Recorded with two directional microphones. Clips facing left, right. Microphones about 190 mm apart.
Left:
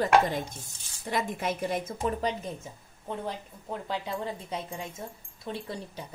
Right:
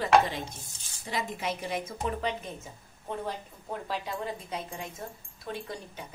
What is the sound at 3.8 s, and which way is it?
Speech, 25° left (ahead or behind).